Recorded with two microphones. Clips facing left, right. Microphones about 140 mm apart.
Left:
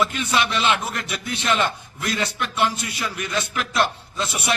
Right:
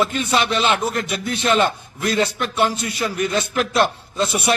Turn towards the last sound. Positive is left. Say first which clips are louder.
# right 6 dB
turn(degrees=-35)  # may be behind; listen again after turning